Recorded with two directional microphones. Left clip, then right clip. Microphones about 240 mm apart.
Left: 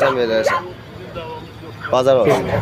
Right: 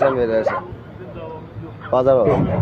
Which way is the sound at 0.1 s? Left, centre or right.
Centre.